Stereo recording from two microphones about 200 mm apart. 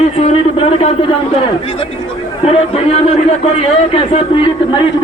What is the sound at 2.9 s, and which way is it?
A man's voice, 30° left (ahead or behind).